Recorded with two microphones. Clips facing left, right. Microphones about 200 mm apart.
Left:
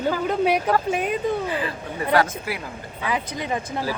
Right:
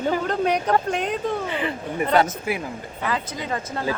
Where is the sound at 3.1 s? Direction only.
15° left (ahead or behind).